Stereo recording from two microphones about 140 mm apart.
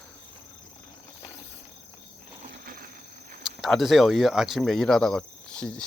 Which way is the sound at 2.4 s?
90° right.